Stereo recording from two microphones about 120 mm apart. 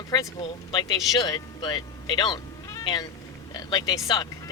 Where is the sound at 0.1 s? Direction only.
40° left (ahead or behind).